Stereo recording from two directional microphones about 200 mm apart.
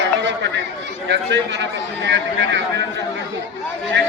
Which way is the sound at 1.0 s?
60° right (ahead or behind).